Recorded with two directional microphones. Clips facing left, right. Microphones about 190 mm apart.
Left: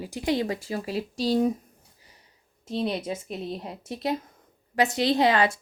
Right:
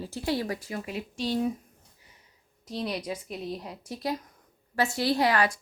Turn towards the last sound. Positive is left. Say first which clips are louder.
# left 3 dB
turn(degrees=25)  # may be behind; listen again after turning